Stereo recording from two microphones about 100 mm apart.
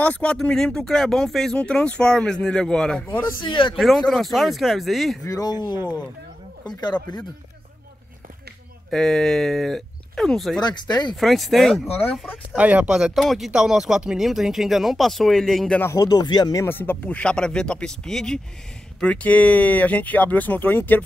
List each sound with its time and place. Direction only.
0.0 s speech: 15° left (ahead or behind)
3.1 s speech: 20° left (ahead or behind)
3.4 s a man's voice: 55° left (ahead or behind)
3.7 s speech: centre (ahead or behind)
5.2 s speech: 35° left (ahead or behind)
8.9 s speech: 5° left (ahead or behind)
10.6 s speech: 45° left (ahead or behind)
11.1 s speech: centre (ahead or behind)
11.9 s speech: 25° left (ahead or behind)
12.5 s speech: 15° right (ahead or behind); by 15.7 s centre (ahead or behind)
15.9 s speech: 40° left (ahead or behind)
16.6 s speech: 20° left (ahead or behind)